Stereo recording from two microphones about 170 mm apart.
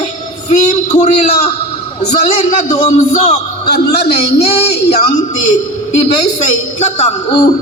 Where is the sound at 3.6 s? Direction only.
75° left (ahead or behind).